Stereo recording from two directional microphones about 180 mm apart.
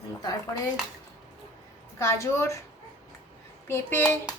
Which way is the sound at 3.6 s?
15° left (ahead or behind).